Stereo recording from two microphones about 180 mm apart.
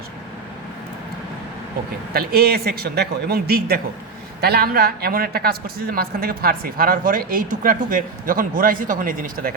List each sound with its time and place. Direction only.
2.1 s speech: 60° right (ahead or behind)